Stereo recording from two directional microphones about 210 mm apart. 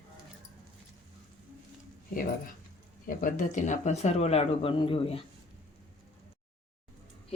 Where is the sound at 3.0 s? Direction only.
40° left (ahead or behind).